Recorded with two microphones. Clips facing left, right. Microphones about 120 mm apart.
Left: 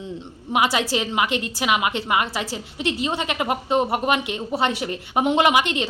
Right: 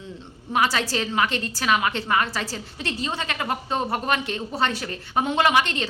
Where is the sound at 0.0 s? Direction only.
20° left (ahead or behind).